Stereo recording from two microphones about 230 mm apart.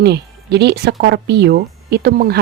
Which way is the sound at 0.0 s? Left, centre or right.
Right.